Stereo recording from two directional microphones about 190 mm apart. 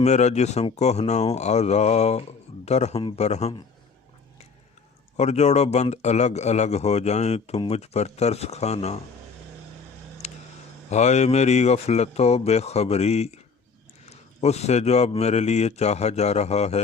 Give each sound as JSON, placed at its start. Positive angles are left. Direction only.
{"t": 0.0, "sound": "speech", "side_deg": 35}
{"t": 5.1, "sound": "speech", "side_deg": 35}
{"t": 10.2, "sound": "a sound", "side_deg": 35}
{"t": 10.8, "sound": "speech", "side_deg": 35}